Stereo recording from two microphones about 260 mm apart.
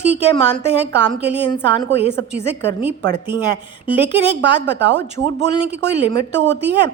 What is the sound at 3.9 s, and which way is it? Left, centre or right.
Speech, right.